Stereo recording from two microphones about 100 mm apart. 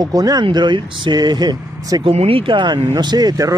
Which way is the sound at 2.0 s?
80° right.